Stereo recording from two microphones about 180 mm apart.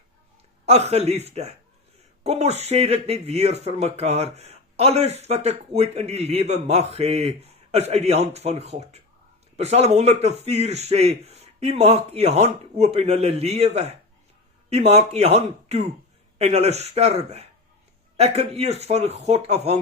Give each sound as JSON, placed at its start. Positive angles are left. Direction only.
{"t": 0.6, "sound": "speech", "side_deg": -35}